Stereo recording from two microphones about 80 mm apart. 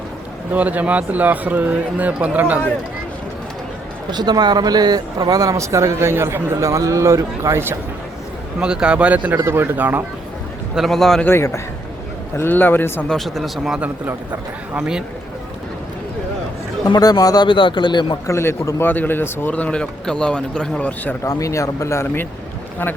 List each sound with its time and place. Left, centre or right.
0.5 s speech: centre
4.1 s speech: right
8.6 s speech: centre
9.4 s speech: right
10.8 s speech: centre
11.3 s a man's voice: left
13.1 s speech: centre
14.8 s speech: centre
17.0 s a man's voice: left
17.4 s speech: left
18.3 s speech: left
18.8 s speech: left
21.2 s speech: left